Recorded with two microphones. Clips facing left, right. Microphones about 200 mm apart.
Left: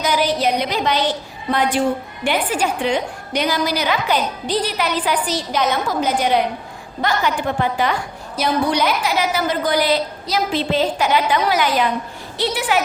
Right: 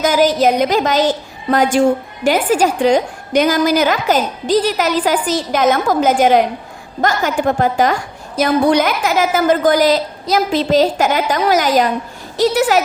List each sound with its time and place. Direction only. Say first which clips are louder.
0.0 s a woman's voice: right 6 dB; 45° right (ahead or behind)